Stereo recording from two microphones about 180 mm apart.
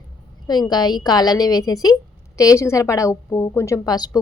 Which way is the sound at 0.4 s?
25° left (ahead or behind).